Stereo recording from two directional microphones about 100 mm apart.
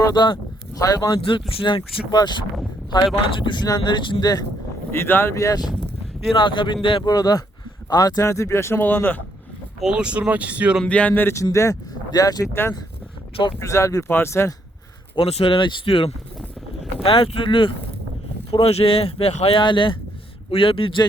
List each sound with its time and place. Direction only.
0.0 s speech: 45° left (ahead or behind)
1.2 s speech: 65° left (ahead or behind); by 4.4 s 45° left (ahead or behind)
4.9 s speech: 25° left (ahead or behind)
6.3 s speech: 55° left (ahead or behind)
7.0 s speech: 40° left (ahead or behind); by 9.2 s 20° left (ahead or behind)
9.8 s speech: 10° right (ahead or behind)
10.8 s speech: 15° left (ahead or behind)
11.5 s speech: 35° left (ahead or behind)
13.6 s speech: 30° left (ahead or behind)
15.1 s speech: 75° left (ahead or behind); by 17.7 s 60° left (ahead or behind)
18.5 s speech: 80° left
19.5 s speech: 55° left (ahead or behind)
20.5 s speech: 65° left (ahead or behind)